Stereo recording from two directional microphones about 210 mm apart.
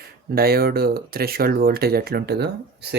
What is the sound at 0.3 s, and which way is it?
Speech, 45° right (ahead or behind).